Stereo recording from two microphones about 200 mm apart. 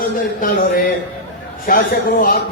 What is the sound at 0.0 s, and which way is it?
A man's voice, 45° left (ahead or behind).